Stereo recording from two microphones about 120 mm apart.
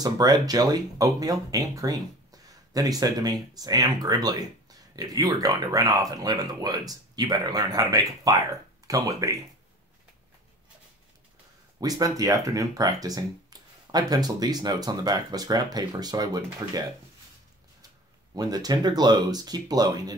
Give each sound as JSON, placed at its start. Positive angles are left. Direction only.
{"t": 0.0, "sound": "speech", "side_deg": -30}
{"t": 11.8, "sound": "speech", "side_deg": -30}
{"t": 18.3, "sound": "speech", "side_deg": -35}